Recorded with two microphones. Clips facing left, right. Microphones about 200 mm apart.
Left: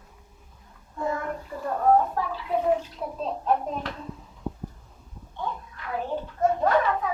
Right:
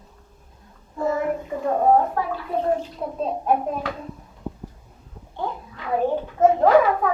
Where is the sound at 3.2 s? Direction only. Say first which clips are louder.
Right 4 dB; 15° right (ahead or behind).